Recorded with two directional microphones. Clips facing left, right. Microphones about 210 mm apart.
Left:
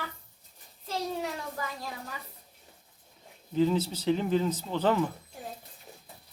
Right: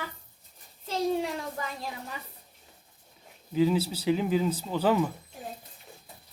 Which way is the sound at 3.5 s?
10° right (ahead or behind).